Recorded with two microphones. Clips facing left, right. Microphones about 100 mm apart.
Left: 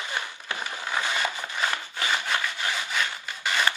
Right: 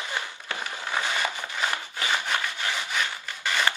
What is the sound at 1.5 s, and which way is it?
Sawing, 20° right (ahead or behind).